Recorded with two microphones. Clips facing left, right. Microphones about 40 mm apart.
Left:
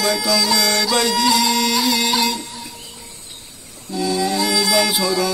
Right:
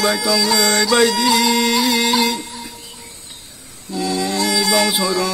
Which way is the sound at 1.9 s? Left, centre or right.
Centre.